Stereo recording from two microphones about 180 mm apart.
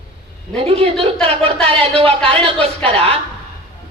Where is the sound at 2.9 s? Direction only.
35° right (ahead or behind).